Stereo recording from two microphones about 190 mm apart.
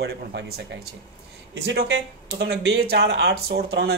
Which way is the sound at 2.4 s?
55° right (ahead or behind).